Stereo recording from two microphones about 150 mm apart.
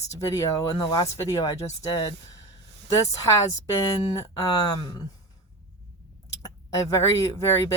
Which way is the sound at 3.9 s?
25° left (ahead or behind).